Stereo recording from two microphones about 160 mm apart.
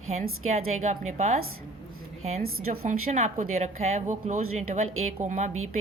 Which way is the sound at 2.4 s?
50° right (ahead or behind).